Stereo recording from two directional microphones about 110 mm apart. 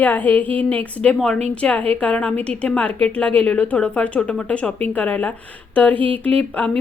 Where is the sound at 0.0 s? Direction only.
15° left (ahead or behind).